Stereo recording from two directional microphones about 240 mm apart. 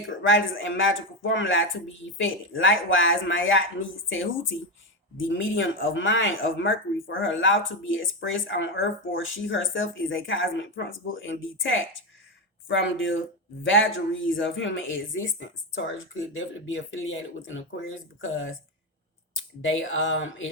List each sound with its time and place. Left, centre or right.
0.2 s speech: left
5.3 s speech: left
19.6 s speech: left